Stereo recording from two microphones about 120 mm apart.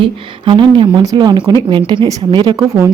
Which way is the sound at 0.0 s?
45° right (ahead or behind).